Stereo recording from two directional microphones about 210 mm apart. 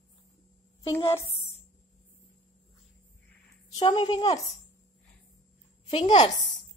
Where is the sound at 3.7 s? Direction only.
20° left (ahead or behind).